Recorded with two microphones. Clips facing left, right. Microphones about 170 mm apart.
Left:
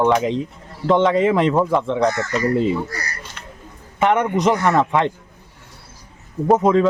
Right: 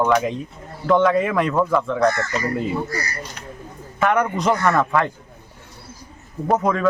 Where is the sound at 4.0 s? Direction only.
20° left (ahead or behind).